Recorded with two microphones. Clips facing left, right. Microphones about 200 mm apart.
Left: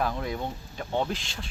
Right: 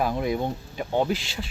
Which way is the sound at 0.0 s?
15° right (ahead or behind).